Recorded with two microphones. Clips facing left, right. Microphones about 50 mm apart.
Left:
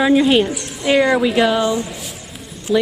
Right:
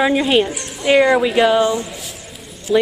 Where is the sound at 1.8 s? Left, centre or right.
Centre.